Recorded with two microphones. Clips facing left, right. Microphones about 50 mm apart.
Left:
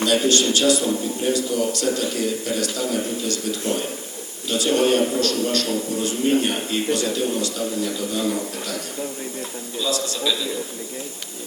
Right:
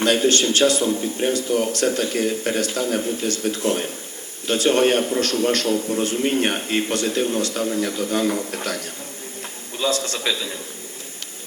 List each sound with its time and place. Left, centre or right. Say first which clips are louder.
0.3 s speech: even; right
9.8 s speech: right 1 dB; right